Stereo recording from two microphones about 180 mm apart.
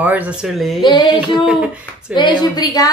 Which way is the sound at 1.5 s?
5° right (ahead or behind).